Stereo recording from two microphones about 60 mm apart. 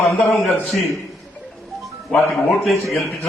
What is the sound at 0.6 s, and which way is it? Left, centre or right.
Speech, centre.